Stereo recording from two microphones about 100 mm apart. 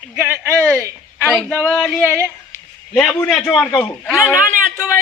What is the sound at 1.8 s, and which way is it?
Speech, 20° left (ahead or behind).